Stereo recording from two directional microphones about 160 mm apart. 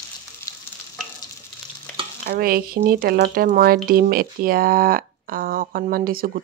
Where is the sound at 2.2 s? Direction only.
70° right (ahead or behind).